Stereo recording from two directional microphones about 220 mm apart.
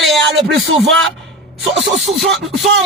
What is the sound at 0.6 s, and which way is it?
Speech, 60° right (ahead or behind).